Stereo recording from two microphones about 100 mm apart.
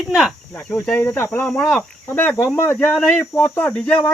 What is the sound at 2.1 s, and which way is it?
Speech, 20° left (ahead or behind).